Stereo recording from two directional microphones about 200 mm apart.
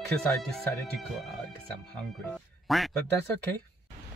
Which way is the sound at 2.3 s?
Centre (ahead or behind).